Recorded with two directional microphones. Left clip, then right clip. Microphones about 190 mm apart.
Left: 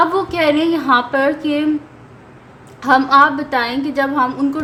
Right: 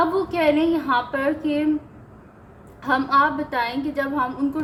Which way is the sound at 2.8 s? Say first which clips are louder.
Left 8 dB; 15° left (ahead or behind).